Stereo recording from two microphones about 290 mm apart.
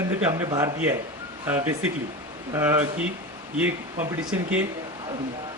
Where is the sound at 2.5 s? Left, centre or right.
Centre.